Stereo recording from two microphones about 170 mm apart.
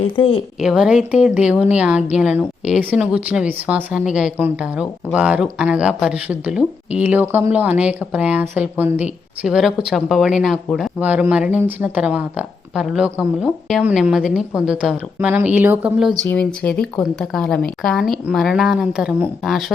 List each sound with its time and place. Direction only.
0.2 s a woman's voice: 35° left (ahead or behind)
0.6 s speech: 5° right (ahead or behind)
16.3 s speech: 10° left (ahead or behind)